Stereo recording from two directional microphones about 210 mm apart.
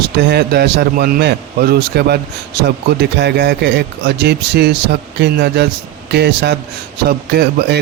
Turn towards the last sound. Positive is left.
turn(degrees=-50)  # may be behind; listen again after turning